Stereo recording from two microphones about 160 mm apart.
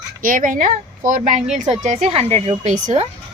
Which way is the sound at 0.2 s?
55° right (ahead or behind).